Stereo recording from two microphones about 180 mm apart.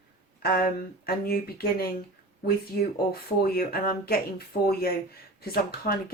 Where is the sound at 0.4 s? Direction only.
55° left (ahead or behind).